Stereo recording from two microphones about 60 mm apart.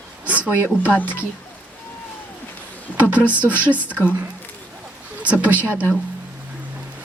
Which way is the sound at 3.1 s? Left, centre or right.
Right.